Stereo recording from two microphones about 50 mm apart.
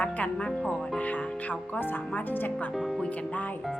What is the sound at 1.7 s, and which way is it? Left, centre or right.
Speech, left.